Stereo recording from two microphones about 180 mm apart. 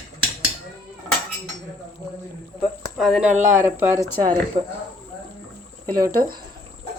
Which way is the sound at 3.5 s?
15° right (ahead or behind).